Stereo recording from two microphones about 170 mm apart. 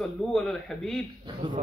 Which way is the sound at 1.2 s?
30° right (ahead or behind).